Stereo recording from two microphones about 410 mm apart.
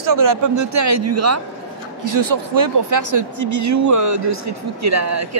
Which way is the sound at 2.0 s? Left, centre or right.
Right.